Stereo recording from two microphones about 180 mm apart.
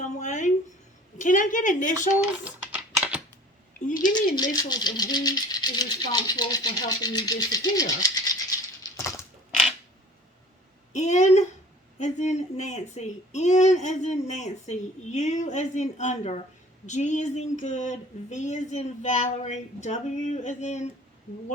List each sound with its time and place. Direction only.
0.0 s a sound: 45° left (ahead or behind)
1.2 s speech: 45° left (ahead or behind)
2.4 s typing: 5° right (ahead or behind)
4.5 s speech: 20° left (ahead or behind)
10.9 s speech: 40° left (ahead or behind)